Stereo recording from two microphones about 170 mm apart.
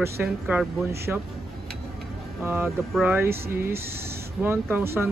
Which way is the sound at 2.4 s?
10° right (ahead or behind).